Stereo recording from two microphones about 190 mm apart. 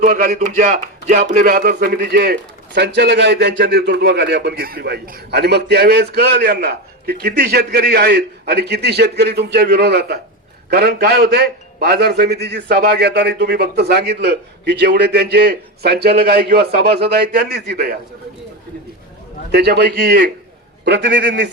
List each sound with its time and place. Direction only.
0.0 s speech: 45° right (ahead or behind)
19.5 s speech: 60° right (ahead or behind)